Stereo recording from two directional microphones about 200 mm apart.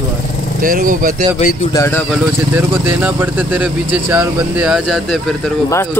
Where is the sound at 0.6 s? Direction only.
45° right (ahead or behind).